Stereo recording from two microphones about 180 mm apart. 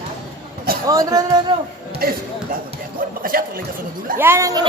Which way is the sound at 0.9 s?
20° right (ahead or behind).